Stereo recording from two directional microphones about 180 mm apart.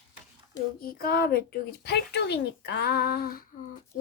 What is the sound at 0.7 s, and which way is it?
A child's voice, 55° left (ahead or behind).